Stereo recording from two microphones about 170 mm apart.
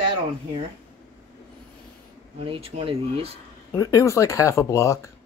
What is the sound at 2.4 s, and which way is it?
Speech, 35° right (ahead or behind).